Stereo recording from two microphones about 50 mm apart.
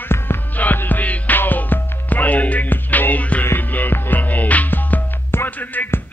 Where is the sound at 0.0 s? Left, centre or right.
Left.